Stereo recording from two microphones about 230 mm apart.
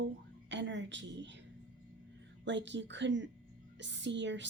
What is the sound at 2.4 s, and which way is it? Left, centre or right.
A woman's voice, right.